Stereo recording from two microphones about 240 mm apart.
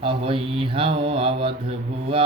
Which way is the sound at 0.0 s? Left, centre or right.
Right.